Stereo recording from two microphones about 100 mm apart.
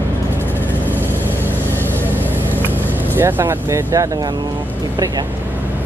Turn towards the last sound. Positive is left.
turn(degrees=-25)  # may be behind; listen again after turning